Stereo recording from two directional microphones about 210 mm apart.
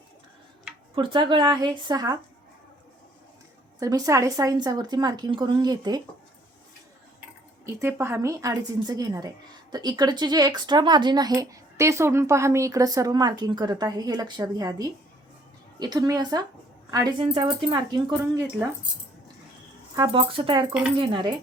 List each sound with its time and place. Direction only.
0.9 s speech: 25° right (ahead or behind)
3.8 s speech: 15° right (ahead or behind)
7.6 s a woman's voice: 15° right (ahead or behind)
20.0 s speech: 25° right (ahead or behind)